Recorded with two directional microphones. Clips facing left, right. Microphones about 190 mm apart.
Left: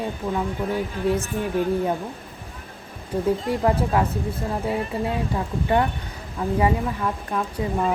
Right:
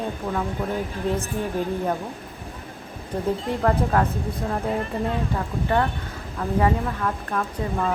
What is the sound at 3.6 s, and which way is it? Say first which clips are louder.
Speech: even; 10° left (ahead or behind).